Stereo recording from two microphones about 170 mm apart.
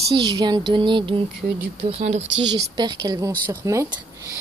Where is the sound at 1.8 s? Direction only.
35° right (ahead or behind).